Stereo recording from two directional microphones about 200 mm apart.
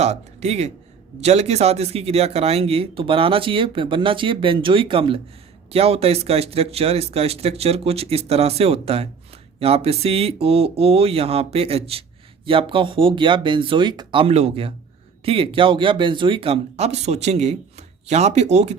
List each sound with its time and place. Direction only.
0.0 s speech: 35° right (ahead or behind)